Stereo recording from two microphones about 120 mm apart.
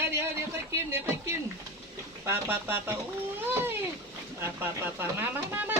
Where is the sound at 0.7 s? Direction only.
20° right (ahead or behind).